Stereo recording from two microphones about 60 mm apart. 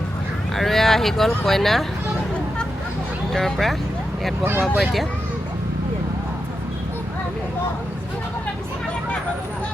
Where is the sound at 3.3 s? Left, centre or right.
Centre.